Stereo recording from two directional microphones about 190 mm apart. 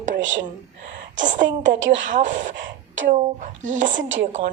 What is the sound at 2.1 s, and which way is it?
Speech, 40° right (ahead or behind).